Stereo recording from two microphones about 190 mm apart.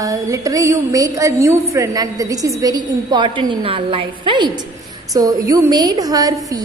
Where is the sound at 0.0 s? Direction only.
15° right (ahead or behind).